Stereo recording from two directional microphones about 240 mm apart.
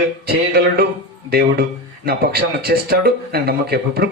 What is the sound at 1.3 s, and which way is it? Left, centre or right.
Speech, right.